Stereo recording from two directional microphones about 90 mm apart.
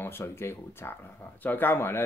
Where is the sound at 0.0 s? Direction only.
25° left (ahead or behind).